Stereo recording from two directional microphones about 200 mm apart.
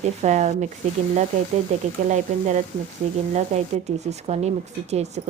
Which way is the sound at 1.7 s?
35° right (ahead or behind).